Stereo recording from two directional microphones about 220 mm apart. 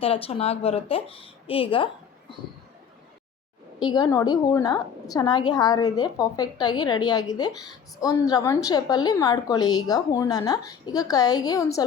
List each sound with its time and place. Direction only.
0.0 s a woman's voice: 25° left (ahead or behind)
3.8 s a woman's voice: 20° left (ahead or behind)